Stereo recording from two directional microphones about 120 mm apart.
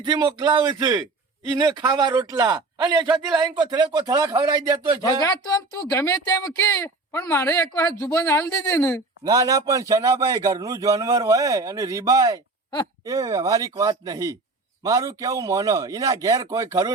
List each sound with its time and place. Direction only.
0.0 s a man's voice: 40° right (ahead or behind)
5.2 s speech: 35° left (ahead or behind)
9.2 s a man's voice: 30° right (ahead or behind)